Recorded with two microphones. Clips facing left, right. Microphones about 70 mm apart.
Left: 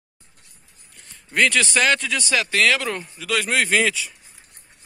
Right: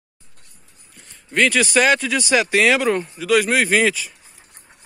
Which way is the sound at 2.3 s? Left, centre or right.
Centre.